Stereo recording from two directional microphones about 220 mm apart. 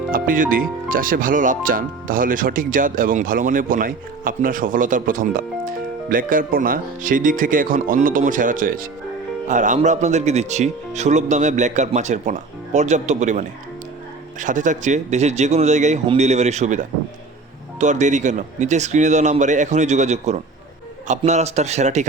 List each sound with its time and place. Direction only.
0.1 s speech: 40° right (ahead or behind)